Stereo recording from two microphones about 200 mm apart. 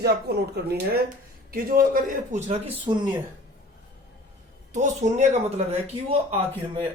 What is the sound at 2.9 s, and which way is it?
Speech, 25° right (ahead or behind).